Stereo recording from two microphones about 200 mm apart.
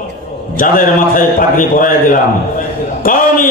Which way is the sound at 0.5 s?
45° left (ahead or behind).